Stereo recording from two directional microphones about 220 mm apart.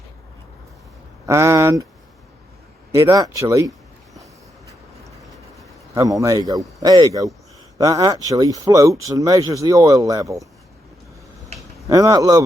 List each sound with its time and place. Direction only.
1.3 s speech: 15° right (ahead or behind)
3.0 s speech: 15° right (ahead or behind)
5.9 s speech: 15° right (ahead or behind)
11.9 s speech: 15° right (ahead or behind)